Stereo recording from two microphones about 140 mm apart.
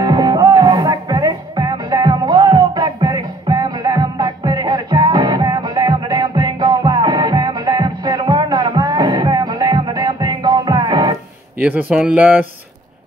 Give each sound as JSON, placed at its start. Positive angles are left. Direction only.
{"t": 0.0, "sound": "music", "side_deg": -30}
{"t": 11.6, "sound": "speech", "side_deg": -10}